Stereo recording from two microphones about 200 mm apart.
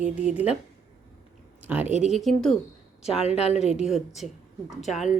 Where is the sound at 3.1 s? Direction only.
30° left (ahead or behind).